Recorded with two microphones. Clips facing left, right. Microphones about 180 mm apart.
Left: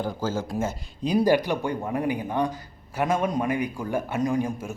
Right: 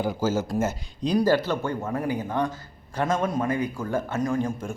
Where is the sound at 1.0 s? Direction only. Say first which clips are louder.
Left 1 dB; 15° left (ahead or behind).